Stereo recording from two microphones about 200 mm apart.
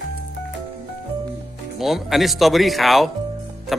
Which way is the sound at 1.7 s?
Centre (ahead or behind).